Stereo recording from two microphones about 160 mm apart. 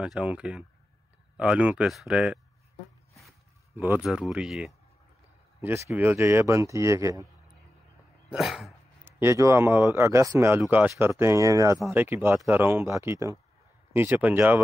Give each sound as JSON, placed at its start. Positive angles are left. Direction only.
{"t": 0.0, "sound": "speech", "side_deg": -5}
{"t": 3.7, "sound": "speech", "side_deg": -15}
{"t": 4.0, "sound": "speech", "side_deg": -5}
{"t": 5.6, "sound": "speech", "side_deg": -15}
{"t": 8.3, "sound": "speech", "side_deg": 0}
{"t": 9.0, "sound": "speech", "side_deg": -15}